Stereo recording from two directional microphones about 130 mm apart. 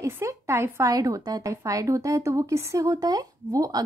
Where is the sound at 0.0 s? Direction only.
20° right (ahead or behind).